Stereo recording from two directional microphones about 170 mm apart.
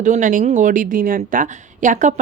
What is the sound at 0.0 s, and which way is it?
A woman's voice, 50° right (ahead or behind).